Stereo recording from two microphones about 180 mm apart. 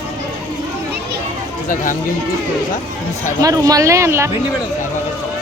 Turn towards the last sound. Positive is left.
turn(degrees=-15)  # may be behind; listen again after turning